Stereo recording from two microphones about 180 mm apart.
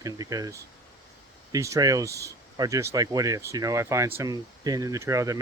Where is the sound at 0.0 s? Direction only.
20° right (ahead or behind).